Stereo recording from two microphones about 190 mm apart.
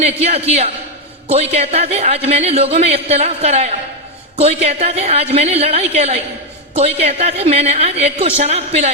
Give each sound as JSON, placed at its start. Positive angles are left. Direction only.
{"t": 0.2, "sound": "a man's voice", "side_deg": -35}